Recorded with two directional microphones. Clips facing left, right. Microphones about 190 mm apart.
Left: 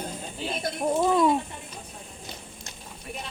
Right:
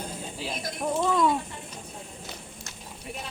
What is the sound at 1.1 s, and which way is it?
Speech, 20° left (ahead or behind).